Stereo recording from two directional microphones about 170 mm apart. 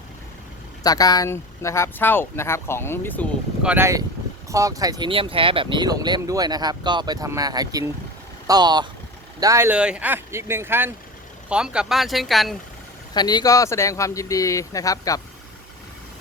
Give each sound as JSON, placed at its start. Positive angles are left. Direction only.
{"t": 0.8, "sound": "speech", "side_deg": 20}
{"t": 3.6, "sound": "speech", "side_deg": -10}
{"t": 13.1, "sound": "speech", "side_deg": 25}